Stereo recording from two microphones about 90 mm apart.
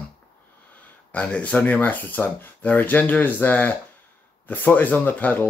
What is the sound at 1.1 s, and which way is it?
Speech, 15° left (ahead or behind).